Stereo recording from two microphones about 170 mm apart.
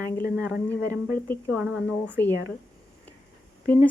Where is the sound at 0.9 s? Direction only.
20° right (ahead or behind).